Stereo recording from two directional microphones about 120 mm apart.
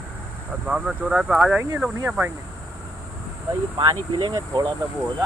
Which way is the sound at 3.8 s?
40° right (ahead or behind).